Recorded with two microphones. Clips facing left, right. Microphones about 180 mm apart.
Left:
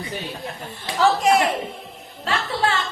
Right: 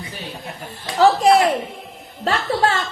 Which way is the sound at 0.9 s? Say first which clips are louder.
Right 4 dB; 35° right (ahead or behind).